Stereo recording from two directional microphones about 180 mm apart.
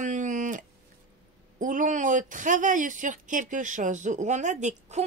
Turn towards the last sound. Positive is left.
turn(degrees=-40)  # may be behind; listen again after turning